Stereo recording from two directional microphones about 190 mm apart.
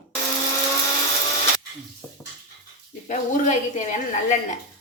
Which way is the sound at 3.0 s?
40° left (ahead or behind).